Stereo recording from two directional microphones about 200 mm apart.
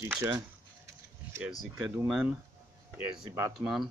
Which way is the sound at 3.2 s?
15° right (ahead or behind).